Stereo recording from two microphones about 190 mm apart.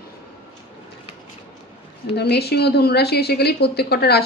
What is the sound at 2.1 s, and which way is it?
A woman's voice, 60° left (ahead or behind).